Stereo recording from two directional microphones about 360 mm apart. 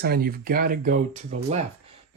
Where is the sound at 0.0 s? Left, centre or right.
Right.